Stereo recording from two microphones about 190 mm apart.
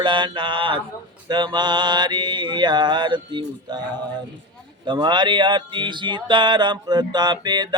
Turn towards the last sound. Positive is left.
turn(degrees=-20)  # may be behind; listen again after turning